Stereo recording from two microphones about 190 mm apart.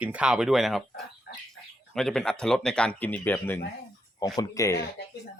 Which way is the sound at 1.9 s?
5° left (ahead or behind).